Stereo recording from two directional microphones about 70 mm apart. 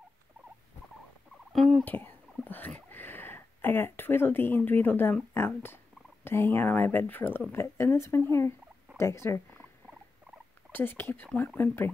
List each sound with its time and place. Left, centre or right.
1.5 s fowl: centre
1.9 s speech: left
7.5 s speech: left
10.7 s speech: left